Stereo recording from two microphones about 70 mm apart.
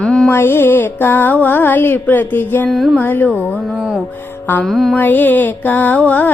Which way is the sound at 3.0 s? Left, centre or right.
Left.